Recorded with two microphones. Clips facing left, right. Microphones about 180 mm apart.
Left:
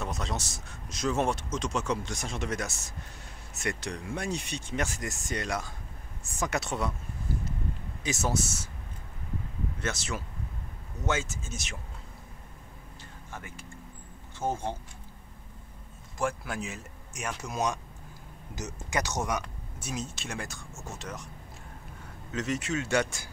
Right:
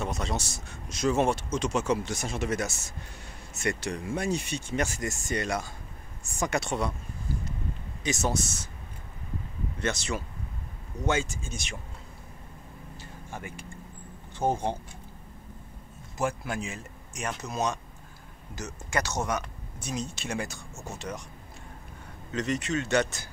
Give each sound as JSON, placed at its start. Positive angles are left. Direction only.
{"t": 0.0, "sound": "speech", "side_deg": 0}
{"t": 8.0, "sound": "speech", "side_deg": 5}
{"t": 9.8, "sound": "speech", "side_deg": 5}
{"t": 13.3, "sound": "speech", "side_deg": -15}
{"t": 16.2, "sound": "speech", "side_deg": 0}
{"t": 22.3, "sound": "speech", "side_deg": 5}